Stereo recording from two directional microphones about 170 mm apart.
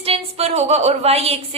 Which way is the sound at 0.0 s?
35° right (ahead or behind).